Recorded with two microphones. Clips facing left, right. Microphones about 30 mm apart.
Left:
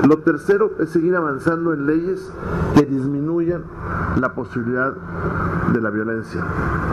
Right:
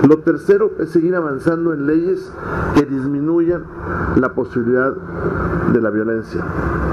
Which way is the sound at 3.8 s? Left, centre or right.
Centre.